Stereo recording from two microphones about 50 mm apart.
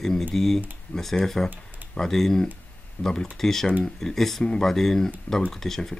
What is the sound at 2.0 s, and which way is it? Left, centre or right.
Speech, centre.